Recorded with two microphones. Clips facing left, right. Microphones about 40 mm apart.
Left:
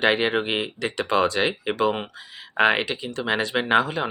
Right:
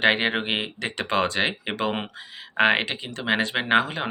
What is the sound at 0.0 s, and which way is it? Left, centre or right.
Speech, right.